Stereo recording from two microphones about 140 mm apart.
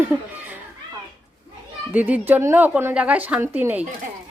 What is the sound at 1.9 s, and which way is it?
Speech, 10° right (ahead or behind).